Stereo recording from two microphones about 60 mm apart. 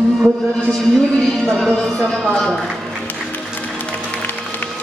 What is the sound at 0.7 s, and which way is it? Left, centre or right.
Speech, centre.